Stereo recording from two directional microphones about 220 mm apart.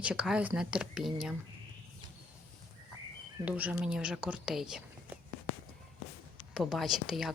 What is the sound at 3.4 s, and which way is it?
Speech, 5° right (ahead or behind).